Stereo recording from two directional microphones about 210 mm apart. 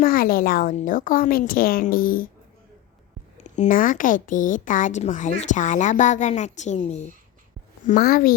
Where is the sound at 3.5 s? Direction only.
40° left (ahead or behind).